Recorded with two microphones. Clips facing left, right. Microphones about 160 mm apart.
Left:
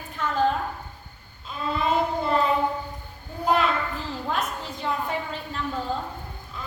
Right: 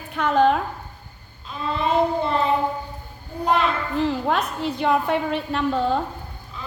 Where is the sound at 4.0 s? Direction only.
65° right (ahead or behind).